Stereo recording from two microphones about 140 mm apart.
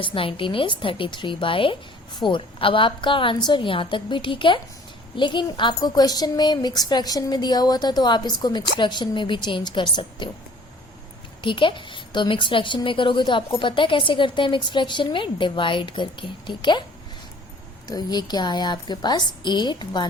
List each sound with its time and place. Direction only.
0.0 s a woman's voice: 40° left (ahead or behind)
11.4 s a woman's voice: 35° left (ahead or behind)
17.8 s a woman's voice: 30° left (ahead or behind)